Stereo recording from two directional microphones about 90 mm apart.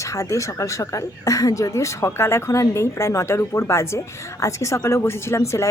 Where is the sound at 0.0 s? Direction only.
35° left (ahead or behind).